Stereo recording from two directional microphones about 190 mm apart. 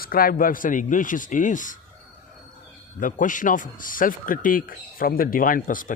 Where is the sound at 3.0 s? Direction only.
45° left (ahead or behind).